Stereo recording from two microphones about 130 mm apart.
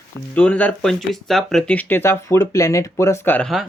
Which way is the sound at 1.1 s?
Centre (ahead or behind).